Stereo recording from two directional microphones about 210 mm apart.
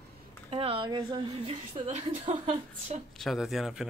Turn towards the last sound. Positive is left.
turn(degrees=0)  # may be behind; listen again after turning